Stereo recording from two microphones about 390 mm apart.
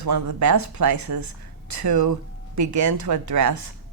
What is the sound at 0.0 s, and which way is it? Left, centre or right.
Speech, right.